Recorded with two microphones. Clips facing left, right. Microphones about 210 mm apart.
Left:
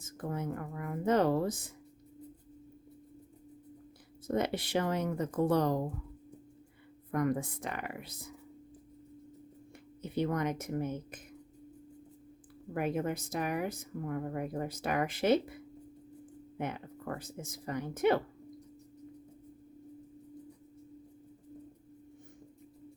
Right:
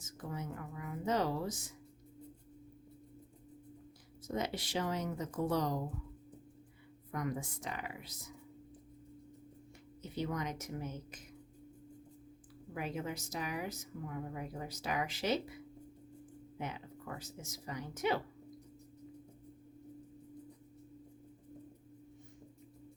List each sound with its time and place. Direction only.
0.0 s a woman's voice: 55° left (ahead or behind)
4.3 s a woman's voice: 60° left (ahead or behind)
7.1 s a woman's voice: 55° left (ahead or behind)
10.0 s a woman's voice: 60° left (ahead or behind)
12.7 s a woman's voice: 55° left (ahead or behind)